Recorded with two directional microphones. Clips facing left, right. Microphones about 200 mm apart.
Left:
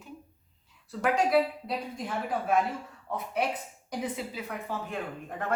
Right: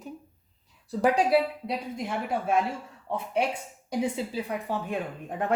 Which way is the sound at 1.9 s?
25° right (ahead or behind).